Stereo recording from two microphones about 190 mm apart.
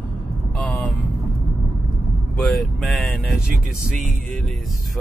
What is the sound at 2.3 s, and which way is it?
Speech, centre (ahead or behind).